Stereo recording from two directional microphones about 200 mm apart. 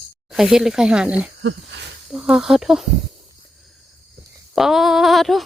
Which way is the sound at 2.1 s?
5° right (ahead or behind).